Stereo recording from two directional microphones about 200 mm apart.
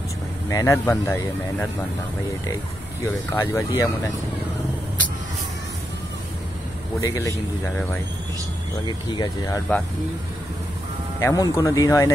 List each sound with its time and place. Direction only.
0.5 s speech: 15° left (ahead or behind)
3.3 s speech: 15° left (ahead or behind)
7.0 s speech: 15° left (ahead or behind)
8.8 s speech: 20° left (ahead or behind)
11.1 s speech: 15° left (ahead or behind)